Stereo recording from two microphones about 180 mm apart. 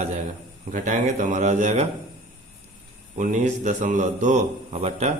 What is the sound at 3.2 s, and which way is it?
A man's voice, 45° right (ahead or behind).